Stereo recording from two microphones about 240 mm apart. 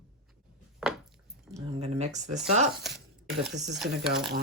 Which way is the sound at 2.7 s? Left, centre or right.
Centre.